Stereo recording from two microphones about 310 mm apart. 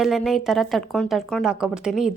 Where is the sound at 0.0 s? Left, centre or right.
Centre.